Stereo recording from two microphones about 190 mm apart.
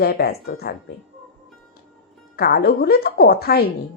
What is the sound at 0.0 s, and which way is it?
Speech, 55° left (ahead or behind).